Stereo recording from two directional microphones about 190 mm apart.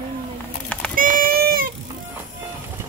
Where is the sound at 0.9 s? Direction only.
45° right (ahead or behind).